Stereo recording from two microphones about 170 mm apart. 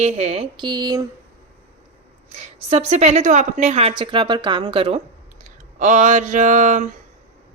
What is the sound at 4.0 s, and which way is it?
Speech, 30° right (ahead or behind).